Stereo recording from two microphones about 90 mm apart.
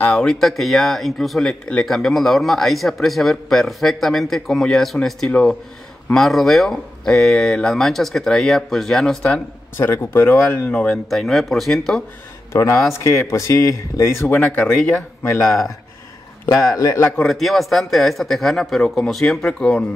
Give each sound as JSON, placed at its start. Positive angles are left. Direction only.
{"t": 0.0, "sound": "speech", "side_deg": 10}
{"t": 9.8, "sound": "speech", "side_deg": 25}
{"t": 10.6, "sound": "speech", "side_deg": 10}
{"t": 11.1, "sound": "speech", "side_deg": 0}
{"t": 12.5, "sound": "speech", "side_deg": 35}
{"t": 14.4, "sound": "speech", "side_deg": 15}
{"t": 15.4, "sound": "speech", "side_deg": 0}
{"t": 16.7, "sound": "speech", "side_deg": 35}
{"t": 17.2, "sound": "speech", "side_deg": 0}